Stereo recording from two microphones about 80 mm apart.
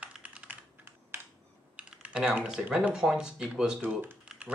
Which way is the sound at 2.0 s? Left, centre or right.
Centre.